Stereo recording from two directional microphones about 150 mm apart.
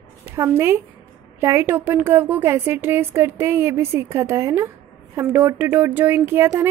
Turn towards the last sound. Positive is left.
turn(degrees=-15)  # may be behind; listen again after turning